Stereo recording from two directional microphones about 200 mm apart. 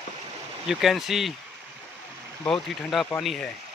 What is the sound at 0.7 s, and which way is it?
Speech, centre (ahead or behind).